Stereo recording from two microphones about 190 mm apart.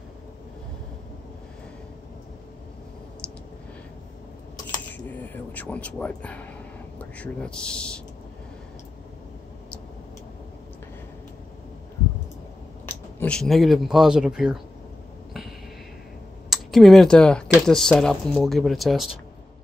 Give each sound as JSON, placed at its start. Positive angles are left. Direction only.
{"t": 4.9, "sound": "a man's voice", "side_deg": 10}
{"t": 12.8, "sound": "speech", "side_deg": 5}
{"t": 16.4, "sound": "speech", "side_deg": 0}